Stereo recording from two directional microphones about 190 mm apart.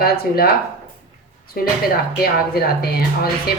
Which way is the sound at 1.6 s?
50° left (ahead or behind).